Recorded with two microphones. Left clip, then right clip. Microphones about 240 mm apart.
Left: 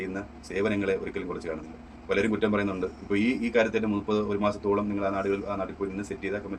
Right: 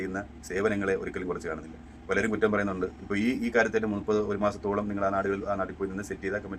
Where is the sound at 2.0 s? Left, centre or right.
Right.